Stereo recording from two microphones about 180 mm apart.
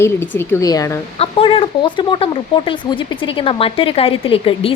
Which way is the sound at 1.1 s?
35° left (ahead or behind).